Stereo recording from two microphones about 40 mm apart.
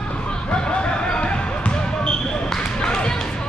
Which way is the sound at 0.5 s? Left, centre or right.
Left.